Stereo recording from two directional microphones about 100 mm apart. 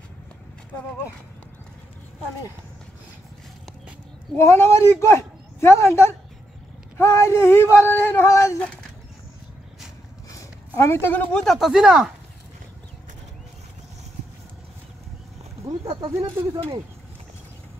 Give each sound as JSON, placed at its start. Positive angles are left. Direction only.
{"t": 4.4, "sound": "speech", "side_deg": 25}
{"t": 10.3, "sound": "a sound", "side_deg": 25}
{"t": 11.3, "sound": "speech", "side_deg": 0}
{"t": 15.8, "sound": "speech", "side_deg": -60}
{"t": 16.1, "sound": "speech", "side_deg": -25}